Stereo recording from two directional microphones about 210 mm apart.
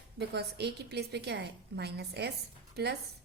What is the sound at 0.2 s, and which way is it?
A woman's voice, 50° right (ahead or behind).